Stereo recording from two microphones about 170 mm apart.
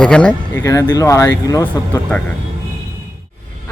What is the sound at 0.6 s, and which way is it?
Speech, 15° left (ahead or behind).